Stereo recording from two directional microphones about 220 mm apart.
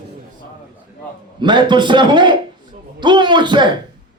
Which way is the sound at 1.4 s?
20° right (ahead or behind).